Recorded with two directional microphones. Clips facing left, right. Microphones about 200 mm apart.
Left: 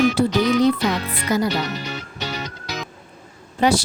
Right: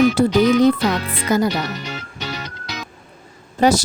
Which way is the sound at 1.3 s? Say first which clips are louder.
Right 3 dB; 50° right (ahead or behind).